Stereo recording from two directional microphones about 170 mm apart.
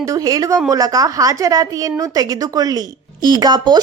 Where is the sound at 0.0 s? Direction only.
20° right (ahead or behind).